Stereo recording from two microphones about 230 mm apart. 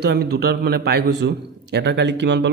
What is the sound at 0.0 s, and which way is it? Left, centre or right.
A man's voice, right.